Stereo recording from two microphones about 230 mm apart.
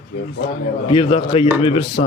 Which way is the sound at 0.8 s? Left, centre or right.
Left.